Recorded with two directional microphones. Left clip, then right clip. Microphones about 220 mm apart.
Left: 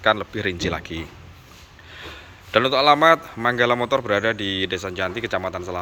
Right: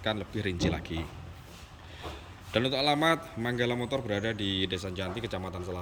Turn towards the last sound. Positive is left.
turn(degrees=0)  # may be behind; listen again after turning